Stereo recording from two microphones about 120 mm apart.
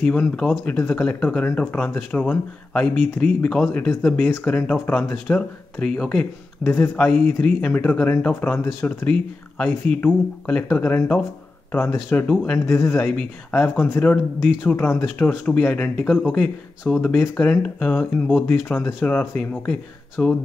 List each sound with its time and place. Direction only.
0.0 s speech: 10° left (ahead or behind)
6.6 s speech: 15° left (ahead or behind)
13.1 s speech: 5° left (ahead or behind)
13.6 s speech: 15° left (ahead or behind)